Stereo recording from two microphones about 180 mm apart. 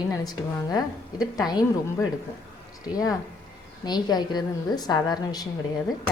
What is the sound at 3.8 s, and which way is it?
A woman's voice, 25° left (ahead or behind).